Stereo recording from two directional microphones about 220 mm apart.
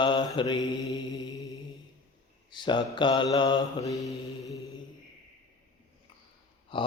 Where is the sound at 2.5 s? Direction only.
20° left (ahead or behind).